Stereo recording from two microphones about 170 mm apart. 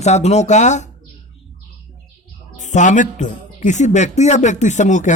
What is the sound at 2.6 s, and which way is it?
A man's voice, 45° left (ahead or behind).